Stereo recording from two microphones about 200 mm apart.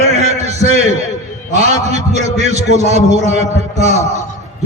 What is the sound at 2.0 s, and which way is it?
A man's voice, 35° right (ahead or behind).